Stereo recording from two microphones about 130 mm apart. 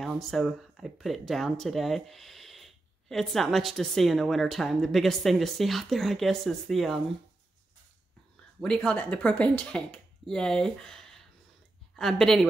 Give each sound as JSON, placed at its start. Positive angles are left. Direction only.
{"t": 0.0, "sound": "speech", "side_deg": 0}
{"t": 8.5, "sound": "speech", "side_deg": 5}